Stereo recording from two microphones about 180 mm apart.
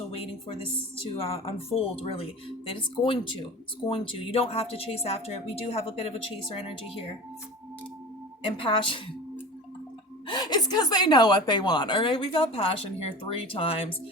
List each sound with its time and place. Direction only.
1.2 s a woman's voice: 35° left (ahead or behind)
8.5 s a woman's voice: 30° left (ahead or behind)
10.2 s a woman's voice: 25° left (ahead or behind)